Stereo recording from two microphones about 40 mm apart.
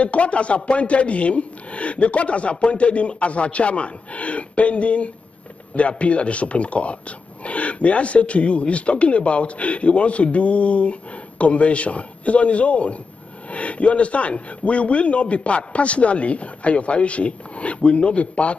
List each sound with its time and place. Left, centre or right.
0.0 s speech: left